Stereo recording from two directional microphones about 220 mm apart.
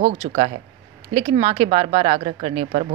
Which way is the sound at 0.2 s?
25° right (ahead or behind).